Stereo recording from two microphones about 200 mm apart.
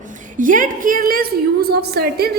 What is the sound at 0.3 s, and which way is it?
A woman's voice, 40° right (ahead or behind).